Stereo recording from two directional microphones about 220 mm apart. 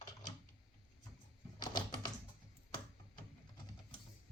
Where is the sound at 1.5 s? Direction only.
20° left (ahead or behind).